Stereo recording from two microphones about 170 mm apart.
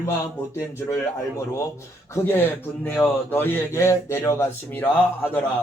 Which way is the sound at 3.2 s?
10° left (ahead or behind).